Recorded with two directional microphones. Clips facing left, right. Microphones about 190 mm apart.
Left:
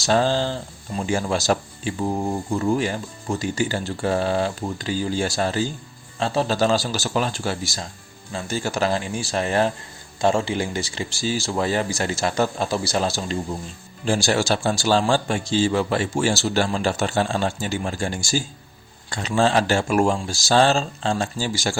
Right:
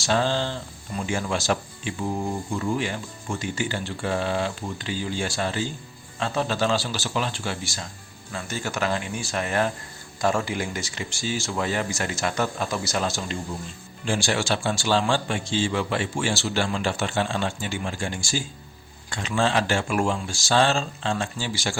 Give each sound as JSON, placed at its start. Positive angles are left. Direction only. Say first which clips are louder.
{"t": 0.0, "sound": "speech", "louder": "left 4 dB", "side_deg": 40}